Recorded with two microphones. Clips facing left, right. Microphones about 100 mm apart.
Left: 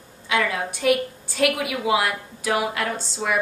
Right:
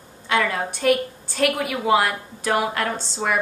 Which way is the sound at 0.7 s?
5° left (ahead or behind).